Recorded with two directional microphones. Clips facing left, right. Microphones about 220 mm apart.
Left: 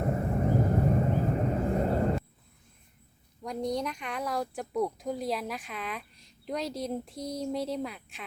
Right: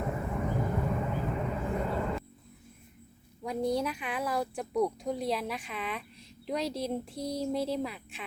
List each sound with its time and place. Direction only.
0.0 s vehicle: 40° left (ahead or behind)
3.4 s speech: 5° right (ahead or behind)